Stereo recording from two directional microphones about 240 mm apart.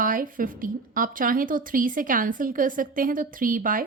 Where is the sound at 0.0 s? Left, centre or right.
Right.